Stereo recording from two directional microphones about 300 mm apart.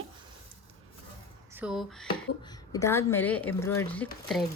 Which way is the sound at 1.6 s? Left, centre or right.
Centre.